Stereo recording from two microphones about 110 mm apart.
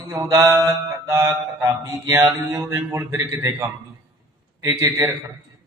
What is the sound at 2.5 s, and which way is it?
A man's voice, 30° right (ahead or behind).